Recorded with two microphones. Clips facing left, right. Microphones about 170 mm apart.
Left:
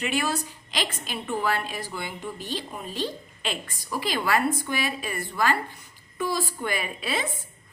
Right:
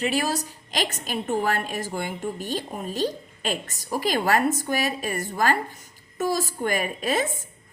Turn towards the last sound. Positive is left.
turn(degrees=-45)  # may be behind; listen again after turning